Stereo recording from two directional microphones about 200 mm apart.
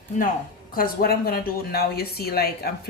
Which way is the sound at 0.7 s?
50° left (ahead or behind).